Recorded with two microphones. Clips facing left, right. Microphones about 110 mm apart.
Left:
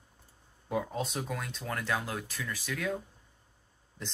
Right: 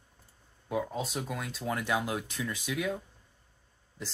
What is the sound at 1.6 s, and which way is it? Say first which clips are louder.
Speech: right 4 dB; 15° right (ahead or behind).